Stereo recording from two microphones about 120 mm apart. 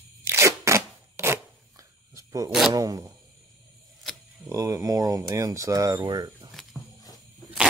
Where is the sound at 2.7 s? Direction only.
30° right (ahead or behind).